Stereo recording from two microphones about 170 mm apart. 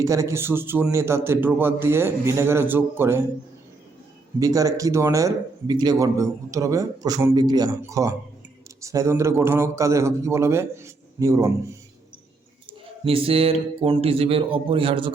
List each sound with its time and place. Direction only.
0.0 s a man's voice: 20° right (ahead or behind)
4.4 s a man's voice: 20° right (ahead or behind)
13.1 s speech: 35° right (ahead or behind)